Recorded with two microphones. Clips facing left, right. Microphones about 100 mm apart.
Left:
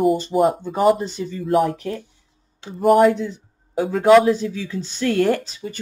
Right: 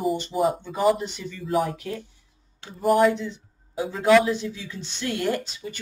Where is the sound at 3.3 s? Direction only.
45° left (ahead or behind).